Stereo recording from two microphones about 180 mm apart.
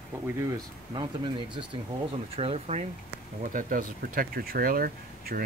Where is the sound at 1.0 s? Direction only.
25° right (ahead or behind).